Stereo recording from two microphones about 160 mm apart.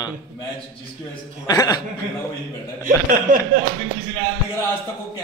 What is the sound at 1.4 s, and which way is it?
Speech, 20° left (ahead or behind).